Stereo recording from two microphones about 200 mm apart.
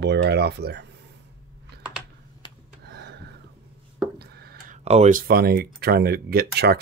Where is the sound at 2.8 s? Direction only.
55° right (ahead or behind).